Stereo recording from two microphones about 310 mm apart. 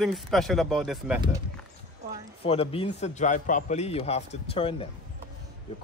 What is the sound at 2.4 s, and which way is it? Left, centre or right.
A man's voice, centre.